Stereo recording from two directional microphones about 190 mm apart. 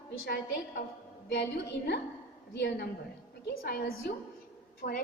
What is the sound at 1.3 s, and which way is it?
A woman's voice, 65° left (ahead or behind).